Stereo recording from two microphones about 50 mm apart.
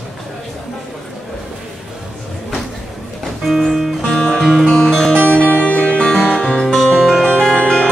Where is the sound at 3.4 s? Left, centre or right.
Centre.